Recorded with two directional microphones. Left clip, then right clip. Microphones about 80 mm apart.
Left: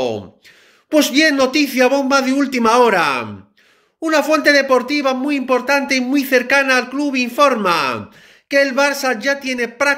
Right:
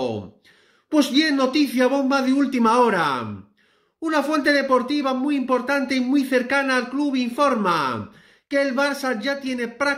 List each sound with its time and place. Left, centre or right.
0.8 s speech: right